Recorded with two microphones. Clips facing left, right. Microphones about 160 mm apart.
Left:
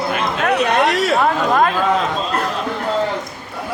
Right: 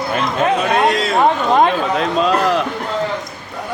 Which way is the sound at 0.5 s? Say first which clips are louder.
Left 2 dB; 75° left (ahead or behind).